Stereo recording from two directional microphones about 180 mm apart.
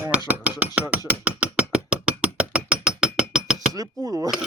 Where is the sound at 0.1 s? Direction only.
5° right (ahead or behind).